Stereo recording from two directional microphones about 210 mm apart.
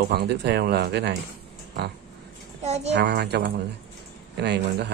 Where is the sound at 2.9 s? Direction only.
55° right (ahead or behind).